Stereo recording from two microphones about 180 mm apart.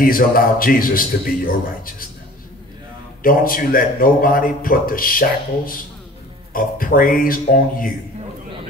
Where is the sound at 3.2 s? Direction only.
50° left (ahead or behind).